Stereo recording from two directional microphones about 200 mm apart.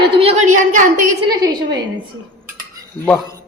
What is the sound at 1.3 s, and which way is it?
Speech, 20° right (ahead or behind).